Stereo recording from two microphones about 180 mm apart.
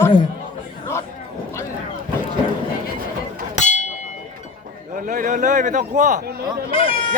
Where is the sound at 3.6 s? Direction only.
40° left (ahead or behind).